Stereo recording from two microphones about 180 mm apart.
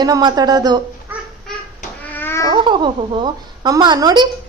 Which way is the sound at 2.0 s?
10° left (ahead or behind).